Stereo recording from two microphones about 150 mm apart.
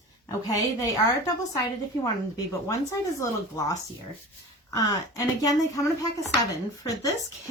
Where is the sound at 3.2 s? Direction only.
20° left (ahead or behind).